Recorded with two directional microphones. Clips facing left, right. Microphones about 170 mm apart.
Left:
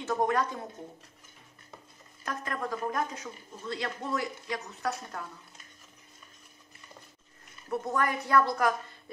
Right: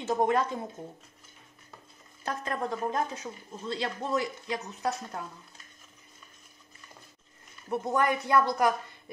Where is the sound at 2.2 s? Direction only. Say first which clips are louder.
Right 2 dB; 25° right (ahead or behind).